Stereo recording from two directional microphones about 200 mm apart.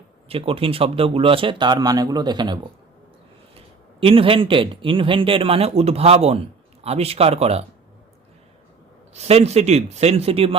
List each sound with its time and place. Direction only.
0.3 s a man's voice: 30° right (ahead or behind)
4.0 s a man's voice: 25° right (ahead or behind)
9.1 s speech: 30° right (ahead or behind)